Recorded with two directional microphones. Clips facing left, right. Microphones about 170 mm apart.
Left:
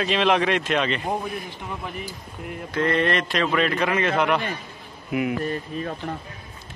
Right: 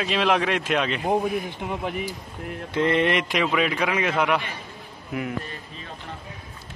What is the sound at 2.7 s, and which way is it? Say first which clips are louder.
A man's voice: right 1 dB; 20° right (ahead or behind).